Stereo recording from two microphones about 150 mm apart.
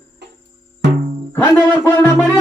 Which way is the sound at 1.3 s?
15° left (ahead or behind).